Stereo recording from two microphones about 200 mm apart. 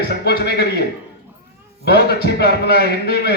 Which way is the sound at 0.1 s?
55° left (ahead or behind).